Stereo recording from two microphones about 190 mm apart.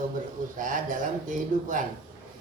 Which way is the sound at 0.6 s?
45° right (ahead or behind).